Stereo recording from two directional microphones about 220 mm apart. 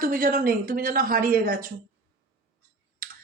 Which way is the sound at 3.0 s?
40° right (ahead or behind).